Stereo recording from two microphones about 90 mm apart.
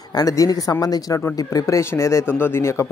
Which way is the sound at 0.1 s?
40° left (ahead or behind).